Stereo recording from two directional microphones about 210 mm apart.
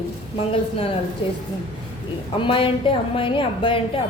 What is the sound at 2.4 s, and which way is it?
A woman's voice, 25° left (ahead or behind).